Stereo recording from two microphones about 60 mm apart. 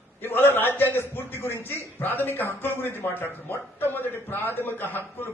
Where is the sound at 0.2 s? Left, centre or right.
Left.